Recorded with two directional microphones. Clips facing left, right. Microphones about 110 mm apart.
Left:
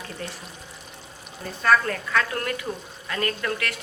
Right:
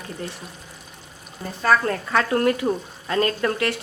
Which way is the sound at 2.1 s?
30° right (ahead or behind).